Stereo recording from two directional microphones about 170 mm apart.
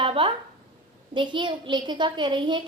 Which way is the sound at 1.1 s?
25° right (ahead or behind).